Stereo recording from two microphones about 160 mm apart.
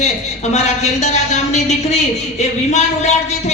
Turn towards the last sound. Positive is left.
turn(degrees=45)  # may be behind; listen again after turning